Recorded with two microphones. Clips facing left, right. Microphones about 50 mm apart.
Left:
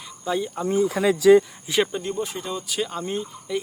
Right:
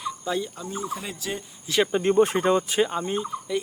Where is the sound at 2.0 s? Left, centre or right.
Right.